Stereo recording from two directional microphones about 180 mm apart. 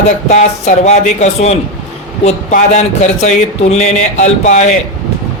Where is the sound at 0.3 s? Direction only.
40° left (ahead or behind).